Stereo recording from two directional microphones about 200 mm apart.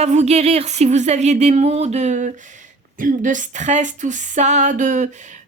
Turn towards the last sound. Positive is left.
turn(degrees=-40)  # may be behind; listen again after turning